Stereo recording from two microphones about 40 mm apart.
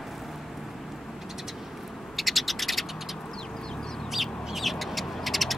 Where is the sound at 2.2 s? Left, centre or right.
Centre.